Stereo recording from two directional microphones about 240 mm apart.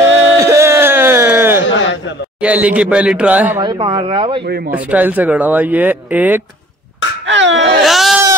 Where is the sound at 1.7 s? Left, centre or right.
Left.